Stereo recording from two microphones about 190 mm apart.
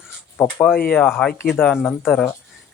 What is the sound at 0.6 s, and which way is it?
Speech, 5° left (ahead or behind).